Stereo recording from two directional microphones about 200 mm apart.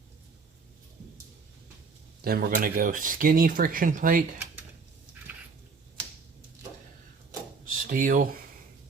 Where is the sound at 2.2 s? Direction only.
50° right (ahead or behind).